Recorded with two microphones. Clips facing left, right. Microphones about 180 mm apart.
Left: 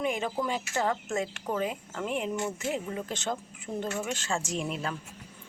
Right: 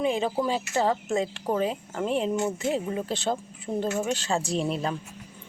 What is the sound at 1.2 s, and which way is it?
Speech, 30° right (ahead or behind).